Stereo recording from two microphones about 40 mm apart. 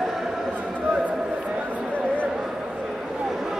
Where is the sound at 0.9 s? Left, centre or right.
Right.